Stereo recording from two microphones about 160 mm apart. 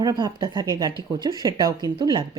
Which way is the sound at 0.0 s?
25° right (ahead or behind).